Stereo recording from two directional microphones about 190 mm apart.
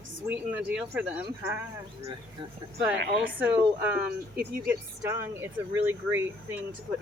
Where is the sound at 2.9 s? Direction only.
60° right (ahead or behind).